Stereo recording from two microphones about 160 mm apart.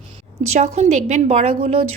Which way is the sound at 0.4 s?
40° right (ahead or behind).